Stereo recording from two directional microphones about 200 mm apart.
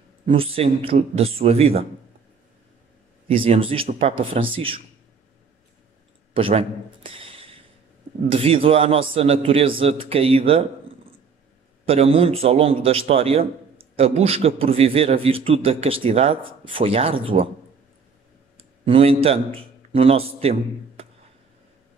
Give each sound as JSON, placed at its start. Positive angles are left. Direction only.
{"t": 0.3, "sound": "a man's voice", "side_deg": -30}
{"t": 3.3, "sound": "a man's voice", "side_deg": -30}
{"t": 6.3, "sound": "a man's voice", "side_deg": -25}
{"t": 11.8, "sound": "a man's voice", "side_deg": -30}
{"t": 18.6, "sound": "a man's voice", "side_deg": -30}